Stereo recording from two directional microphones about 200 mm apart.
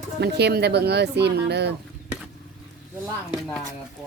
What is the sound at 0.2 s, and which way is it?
Speech, 55° right (ahead or behind).